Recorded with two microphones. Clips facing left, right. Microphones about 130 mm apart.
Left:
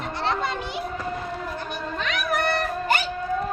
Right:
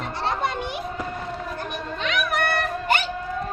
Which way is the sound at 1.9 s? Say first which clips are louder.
Right 1 dB; 40° left (ahead or behind).